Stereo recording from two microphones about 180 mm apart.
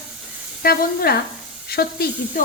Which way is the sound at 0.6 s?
55° left (ahead or behind).